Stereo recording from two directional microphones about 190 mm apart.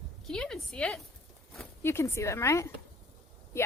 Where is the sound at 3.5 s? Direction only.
15° left (ahead or behind).